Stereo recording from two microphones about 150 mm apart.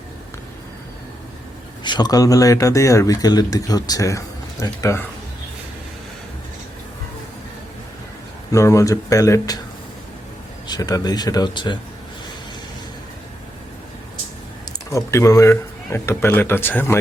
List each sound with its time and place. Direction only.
1.8 s speech: 30° left (ahead or behind)
8.5 s speech: 20° left (ahead or behind)
10.7 s speech: 25° left (ahead or behind)
14.6 s speech: 20° left (ahead or behind)